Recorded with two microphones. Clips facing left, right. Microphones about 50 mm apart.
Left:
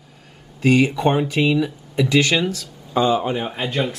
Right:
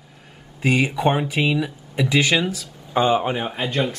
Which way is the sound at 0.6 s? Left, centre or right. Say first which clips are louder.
Left 3 dB; centre.